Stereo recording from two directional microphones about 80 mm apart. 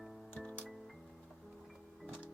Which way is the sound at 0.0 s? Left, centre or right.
Centre.